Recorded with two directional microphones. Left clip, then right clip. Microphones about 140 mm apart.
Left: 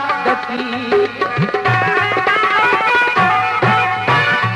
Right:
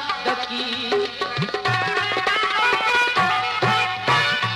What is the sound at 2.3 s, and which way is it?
Music, 20° right (ahead or behind).